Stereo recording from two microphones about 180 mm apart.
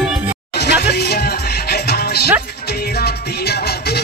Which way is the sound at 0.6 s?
65° left (ahead or behind).